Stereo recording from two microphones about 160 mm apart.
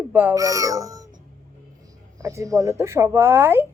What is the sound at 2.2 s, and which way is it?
A child's voice, 20° right (ahead or behind).